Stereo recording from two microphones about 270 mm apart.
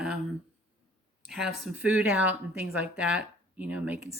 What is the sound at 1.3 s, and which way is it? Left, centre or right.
Speech, centre.